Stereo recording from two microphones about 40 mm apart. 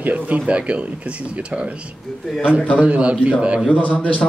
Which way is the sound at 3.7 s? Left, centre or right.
Left.